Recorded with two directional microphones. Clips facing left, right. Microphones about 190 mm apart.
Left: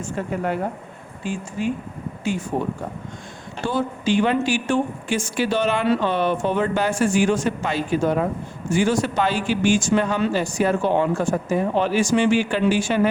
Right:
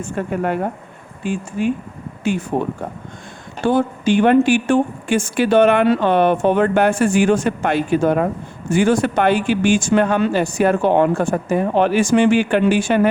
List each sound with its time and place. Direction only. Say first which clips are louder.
0.0 s speech: right 4 dB; 55° right (ahead or behind)
3.7 s speech: right 6 dB; 55° right (ahead or behind)